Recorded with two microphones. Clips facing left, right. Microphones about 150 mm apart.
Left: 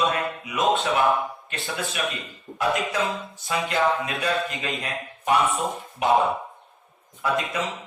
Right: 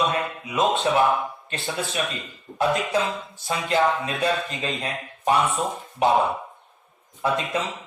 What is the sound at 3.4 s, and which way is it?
A man's voice, 30° right (ahead or behind).